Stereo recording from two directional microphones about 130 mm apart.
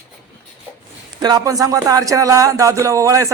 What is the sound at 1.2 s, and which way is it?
A man's voice, 30° right (ahead or behind).